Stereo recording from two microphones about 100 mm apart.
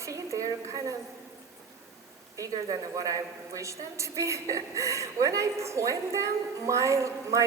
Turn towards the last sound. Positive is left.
turn(degrees=-30)  # may be behind; listen again after turning